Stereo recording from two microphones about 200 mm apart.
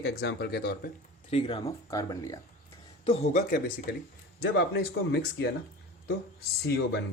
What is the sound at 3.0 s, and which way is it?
Speech, 30° left (ahead or behind).